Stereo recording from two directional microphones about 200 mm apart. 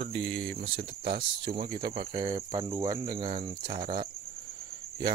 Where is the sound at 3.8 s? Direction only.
45° right (ahead or behind).